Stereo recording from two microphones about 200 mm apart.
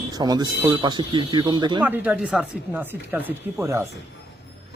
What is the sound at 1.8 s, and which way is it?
Speech, 10° right (ahead or behind).